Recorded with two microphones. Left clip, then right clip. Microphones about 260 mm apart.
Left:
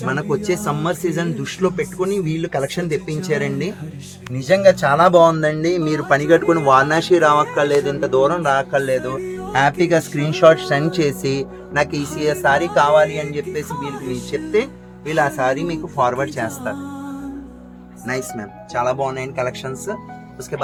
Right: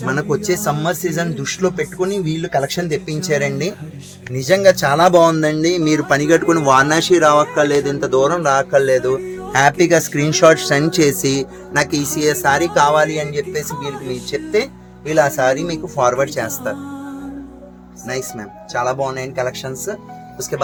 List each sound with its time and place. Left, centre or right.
0.0 s speech: right
9.2 s music: centre
9.5 s speech: right
11.9 s speech: centre
12.2 s speech: right
13.7 s speech: centre
15.1 s speech: right
16.7 s music: centre
18.0 s speech: right